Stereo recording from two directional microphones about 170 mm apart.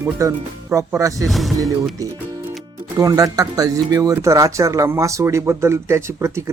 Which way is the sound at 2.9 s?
20° right (ahead or behind).